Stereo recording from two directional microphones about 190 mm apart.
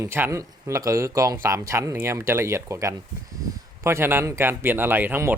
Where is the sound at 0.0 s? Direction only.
15° right (ahead or behind).